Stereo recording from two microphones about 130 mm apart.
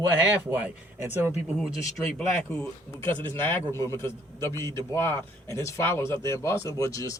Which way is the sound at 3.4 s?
20° left (ahead or behind).